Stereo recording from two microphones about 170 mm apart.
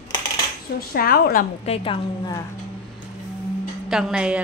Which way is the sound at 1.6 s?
35° left (ahead or behind).